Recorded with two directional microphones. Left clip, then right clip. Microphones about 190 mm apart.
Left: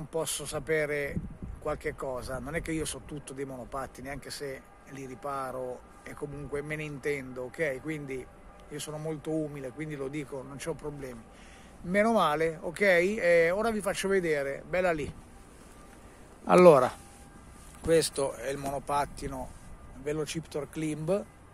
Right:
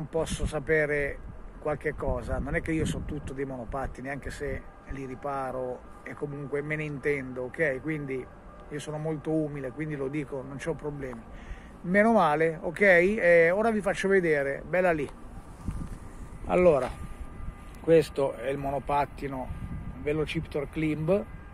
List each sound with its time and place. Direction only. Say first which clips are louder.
0.1 s speech: right 3 dB; 10° left (ahead or behind)
16.4 s speech: left 4 dB; 70° left (ahead or behind)
17.8 s speech: right 4 dB; 10° left (ahead or behind)